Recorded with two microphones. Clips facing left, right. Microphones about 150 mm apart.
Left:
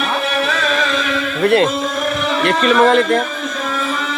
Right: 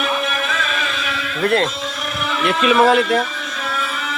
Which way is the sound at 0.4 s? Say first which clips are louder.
Left 6 dB; 40° left (ahead or behind).